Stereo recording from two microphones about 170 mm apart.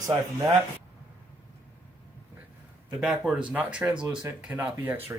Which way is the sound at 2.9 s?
5° right (ahead or behind).